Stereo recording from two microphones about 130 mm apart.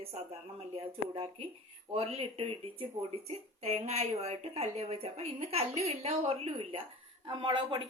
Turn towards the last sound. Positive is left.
turn(degrees=-40)  # may be behind; listen again after turning